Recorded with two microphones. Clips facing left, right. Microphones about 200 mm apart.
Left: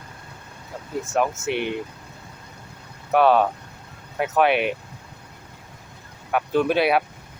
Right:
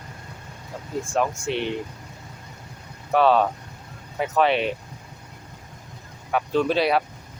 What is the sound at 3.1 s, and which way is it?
Speech, 5° left (ahead or behind).